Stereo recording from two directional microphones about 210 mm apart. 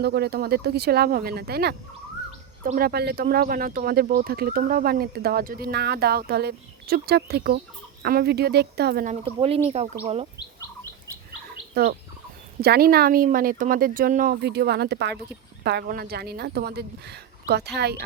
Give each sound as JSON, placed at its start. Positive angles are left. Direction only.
{"t": 0.0, "sound": "speech", "side_deg": -50}
{"t": 9.2, "sound": "speech", "side_deg": -25}
{"t": 11.7, "sound": "bird", "side_deg": -50}
{"t": 12.5, "sound": "speech", "side_deg": -50}